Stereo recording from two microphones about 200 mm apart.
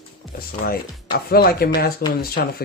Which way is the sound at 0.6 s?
50° left (ahead or behind).